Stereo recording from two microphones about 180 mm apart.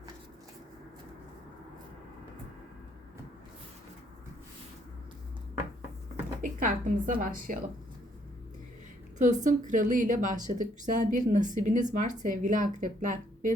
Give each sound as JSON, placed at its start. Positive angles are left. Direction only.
{"t": 6.4, "sound": "a woman's voice", "side_deg": -45}
{"t": 9.1, "sound": "speech", "side_deg": -45}